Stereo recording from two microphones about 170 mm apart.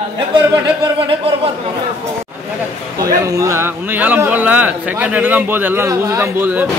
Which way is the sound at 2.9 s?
20° right (ahead or behind).